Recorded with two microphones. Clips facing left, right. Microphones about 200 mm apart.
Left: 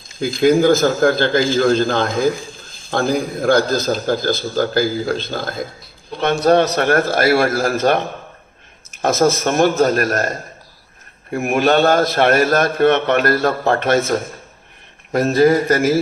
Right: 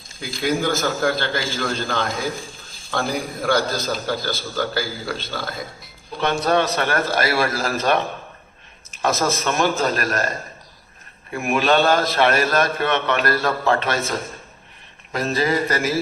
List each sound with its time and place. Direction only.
0.3 s a man's voice: 45° left (ahead or behind)
6.7 s a man's voice: 55° left (ahead or behind)
15.1 s a man's voice: 55° left (ahead or behind)